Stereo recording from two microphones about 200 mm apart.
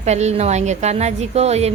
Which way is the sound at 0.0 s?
35° right (ahead or behind).